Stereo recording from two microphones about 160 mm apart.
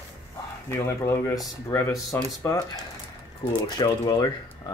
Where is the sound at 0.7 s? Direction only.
15° left (ahead or behind).